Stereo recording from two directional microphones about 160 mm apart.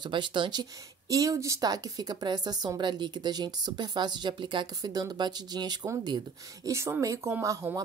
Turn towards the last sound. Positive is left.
turn(degrees=-20)  # may be behind; listen again after turning